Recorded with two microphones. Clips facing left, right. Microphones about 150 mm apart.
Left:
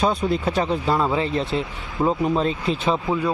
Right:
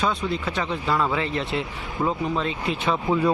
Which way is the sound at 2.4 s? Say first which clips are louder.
Left 4 dB; 35° left (ahead or behind).